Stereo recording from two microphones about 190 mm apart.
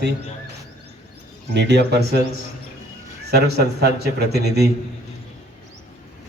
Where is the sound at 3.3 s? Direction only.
60° right (ahead or behind).